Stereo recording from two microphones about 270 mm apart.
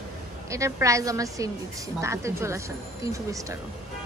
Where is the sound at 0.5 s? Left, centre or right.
Centre.